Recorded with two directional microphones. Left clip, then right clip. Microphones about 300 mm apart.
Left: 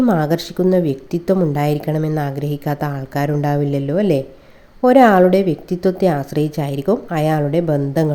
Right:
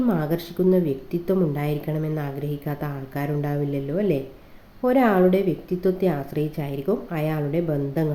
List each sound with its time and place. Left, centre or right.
0.0 s speech: left